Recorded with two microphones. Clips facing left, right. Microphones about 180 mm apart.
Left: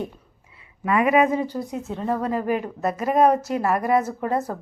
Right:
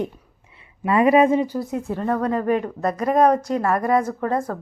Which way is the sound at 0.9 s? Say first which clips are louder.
Right 3 dB; 30° right (ahead or behind).